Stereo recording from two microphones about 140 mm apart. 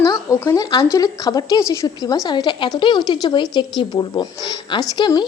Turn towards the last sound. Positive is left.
turn(degrees=30)  # may be behind; listen again after turning